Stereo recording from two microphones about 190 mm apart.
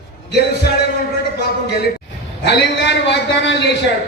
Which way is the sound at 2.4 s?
65° left (ahead or behind).